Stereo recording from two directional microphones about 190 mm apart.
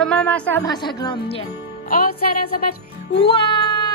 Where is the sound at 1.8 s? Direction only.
50° left (ahead or behind).